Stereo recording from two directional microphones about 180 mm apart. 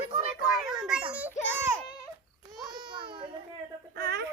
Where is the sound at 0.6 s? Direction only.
5° right (ahead or behind).